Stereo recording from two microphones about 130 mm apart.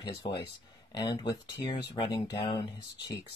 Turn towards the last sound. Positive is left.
turn(degrees=35)  # may be behind; listen again after turning